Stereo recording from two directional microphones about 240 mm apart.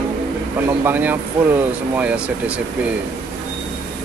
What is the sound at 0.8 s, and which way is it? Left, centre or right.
Speech, centre.